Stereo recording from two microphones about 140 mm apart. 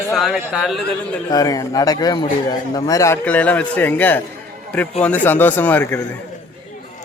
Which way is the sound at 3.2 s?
10° left (ahead or behind).